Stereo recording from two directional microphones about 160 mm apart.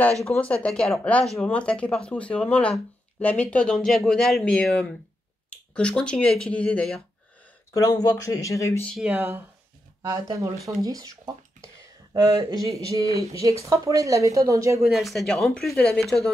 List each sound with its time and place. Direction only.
0.2 s speech: 10° left (ahead or behind)
7.7 s speech: 25° left (ahead or behind)
8.8 s speech: centre (ahead or behind)
9.1 s speech: 15° right (ahead or behind)
14.8 s speech: centre (ahead or behind)